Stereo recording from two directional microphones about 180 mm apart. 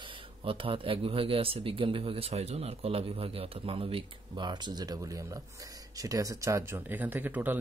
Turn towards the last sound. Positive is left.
turn(degrees=-10)  # may be behind; listen again after turning